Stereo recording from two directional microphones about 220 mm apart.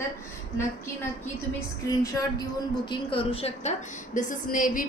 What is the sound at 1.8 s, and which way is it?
A woman's voice, 15° left (ahead or behind).